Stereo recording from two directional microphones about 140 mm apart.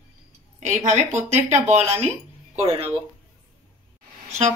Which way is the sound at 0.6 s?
55° right (ahead or behind).